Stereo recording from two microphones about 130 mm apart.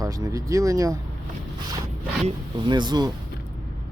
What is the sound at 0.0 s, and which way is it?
Speech, 25° right (ahead or behind).